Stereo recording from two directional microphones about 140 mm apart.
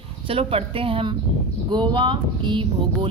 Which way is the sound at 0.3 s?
40° right (ahead or behind).